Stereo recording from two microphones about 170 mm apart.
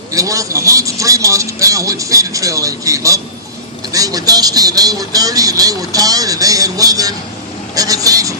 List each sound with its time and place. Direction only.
0.1 s speech: 20° right (ahead or behind)